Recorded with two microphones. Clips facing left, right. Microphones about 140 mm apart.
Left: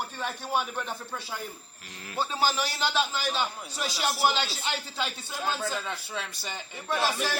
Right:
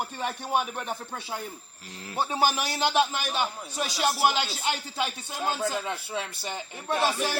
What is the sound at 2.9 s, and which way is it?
Speech, 55° right (ahead or behind).